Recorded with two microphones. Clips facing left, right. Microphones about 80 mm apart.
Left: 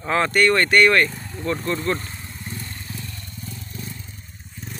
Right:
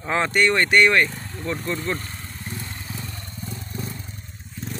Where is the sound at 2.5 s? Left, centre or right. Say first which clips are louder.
Right 1 dB; centre.